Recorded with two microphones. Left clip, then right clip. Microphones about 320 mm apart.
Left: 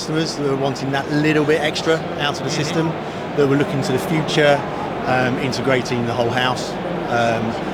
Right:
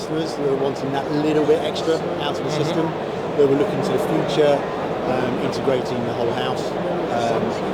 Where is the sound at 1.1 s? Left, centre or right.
Left.